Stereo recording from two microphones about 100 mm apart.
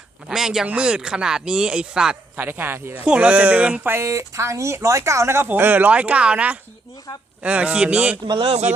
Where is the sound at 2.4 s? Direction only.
20° right (ahead or behind).